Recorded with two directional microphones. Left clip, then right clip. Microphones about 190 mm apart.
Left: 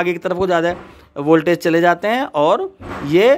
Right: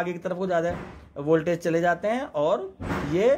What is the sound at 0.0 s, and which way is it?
Speech, 30° left (ahead or behind).